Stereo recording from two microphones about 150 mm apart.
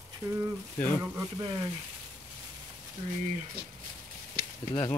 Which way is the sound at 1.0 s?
25° right (ahead or behind).